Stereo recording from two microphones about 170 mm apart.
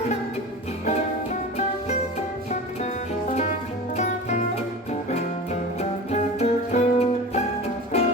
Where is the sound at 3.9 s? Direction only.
40° left (ahead or behind).